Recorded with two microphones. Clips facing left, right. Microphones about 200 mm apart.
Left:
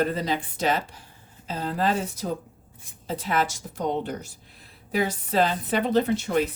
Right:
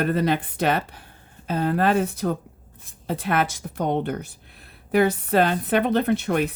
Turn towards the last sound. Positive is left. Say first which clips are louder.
# right 1 dB
turn(degrees=-60)  # may be behind; listen again after turning